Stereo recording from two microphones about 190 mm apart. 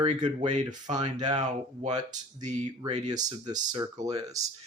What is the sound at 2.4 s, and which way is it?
Speech, 40° right (ahead or behind).